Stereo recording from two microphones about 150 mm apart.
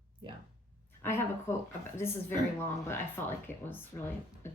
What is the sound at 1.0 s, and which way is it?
Speech, 15° left (ahead or behind).